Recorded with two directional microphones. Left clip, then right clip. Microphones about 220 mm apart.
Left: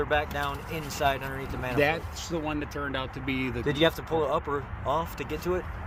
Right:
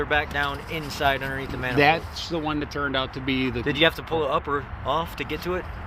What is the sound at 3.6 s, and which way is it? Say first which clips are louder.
Speech: right 3 dB; 5° left (ahead or behind).